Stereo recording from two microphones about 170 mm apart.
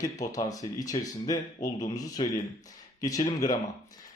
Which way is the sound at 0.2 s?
20° left (ahead or behind).